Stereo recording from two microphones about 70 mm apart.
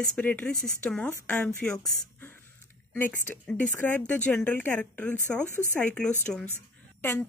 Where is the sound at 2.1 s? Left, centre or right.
Left.